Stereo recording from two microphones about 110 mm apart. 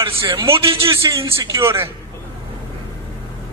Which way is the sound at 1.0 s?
35° right (ahead or behind).